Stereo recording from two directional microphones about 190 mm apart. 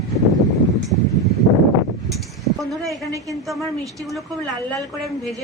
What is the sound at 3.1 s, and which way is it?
Speech, 15° right (ahead or behind).